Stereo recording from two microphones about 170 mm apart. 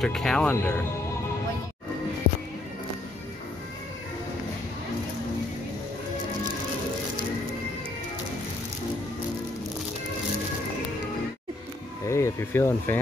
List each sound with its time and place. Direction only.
0.0 s speech: centre (ahead or behind)
12.1 s speech: 15° left (ahead or behind)